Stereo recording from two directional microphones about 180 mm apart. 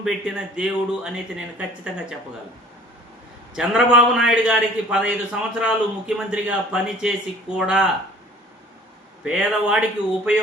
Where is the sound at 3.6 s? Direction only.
5° right (ahead or behind).